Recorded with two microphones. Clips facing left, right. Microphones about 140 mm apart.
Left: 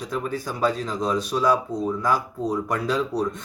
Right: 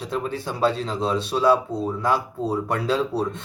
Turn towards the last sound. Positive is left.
turn(degrees=-25)  # may be behind; listen again after turning